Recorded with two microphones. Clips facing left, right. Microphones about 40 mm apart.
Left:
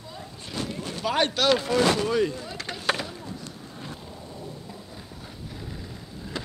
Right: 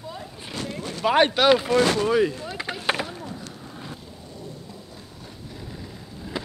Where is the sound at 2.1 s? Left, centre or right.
Centre.